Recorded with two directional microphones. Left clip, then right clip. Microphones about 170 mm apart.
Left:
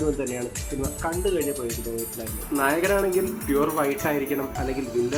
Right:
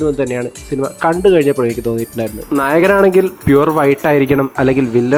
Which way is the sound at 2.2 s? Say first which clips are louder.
Right 16 dB; 60° right (ahead or behind).